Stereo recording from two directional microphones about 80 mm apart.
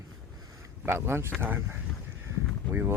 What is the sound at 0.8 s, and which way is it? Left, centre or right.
Speech, right.